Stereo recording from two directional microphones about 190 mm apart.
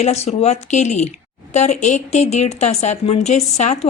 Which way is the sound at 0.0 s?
35° left (ahead or behind).